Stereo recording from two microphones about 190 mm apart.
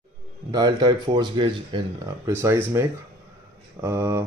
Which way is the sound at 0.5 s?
20° right (ahead or behind).